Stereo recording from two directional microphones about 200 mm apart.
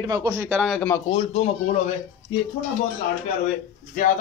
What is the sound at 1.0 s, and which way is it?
Speech, 30° left (ahead or behind).